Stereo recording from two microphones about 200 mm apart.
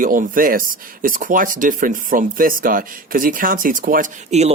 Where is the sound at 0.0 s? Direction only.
45° right (ahead or behind).